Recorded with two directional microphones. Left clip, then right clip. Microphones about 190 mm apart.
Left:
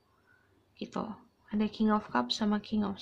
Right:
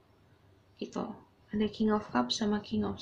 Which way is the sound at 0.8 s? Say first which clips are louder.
Even; 45° left (ahead or behind).